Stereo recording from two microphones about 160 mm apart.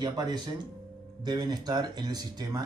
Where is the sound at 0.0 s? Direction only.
25° right (ahead or behind).